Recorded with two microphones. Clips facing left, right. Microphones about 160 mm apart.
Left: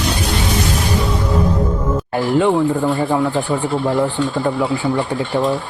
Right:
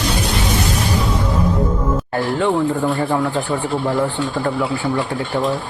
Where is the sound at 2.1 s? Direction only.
15° left (ahead or behind).